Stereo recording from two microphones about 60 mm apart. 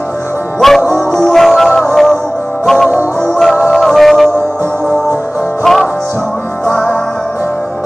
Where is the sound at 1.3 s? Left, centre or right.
Centre.